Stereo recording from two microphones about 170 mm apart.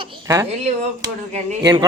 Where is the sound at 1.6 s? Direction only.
20° right (ahead or behind).